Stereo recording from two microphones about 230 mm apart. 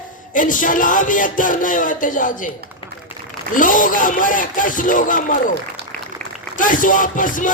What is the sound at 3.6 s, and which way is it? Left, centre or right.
A woman's voice, left.